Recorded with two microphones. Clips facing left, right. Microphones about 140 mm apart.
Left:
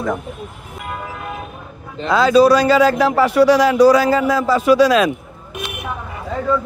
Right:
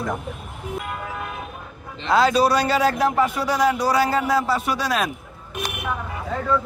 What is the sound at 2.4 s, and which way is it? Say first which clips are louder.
A man's voice: left 7 dB; 90° left.